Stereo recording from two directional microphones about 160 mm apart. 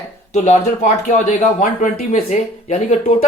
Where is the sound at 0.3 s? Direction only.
45° left (ahead or behind).